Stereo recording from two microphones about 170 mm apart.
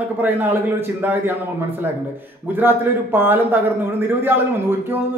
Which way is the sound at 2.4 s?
10° right (ahead or behind).